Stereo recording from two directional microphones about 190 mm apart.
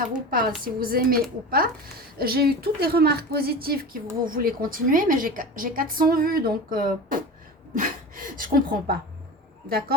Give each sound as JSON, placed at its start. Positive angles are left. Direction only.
{"t": 0.3, "sound": "a woman's voice", "side_deg": -50}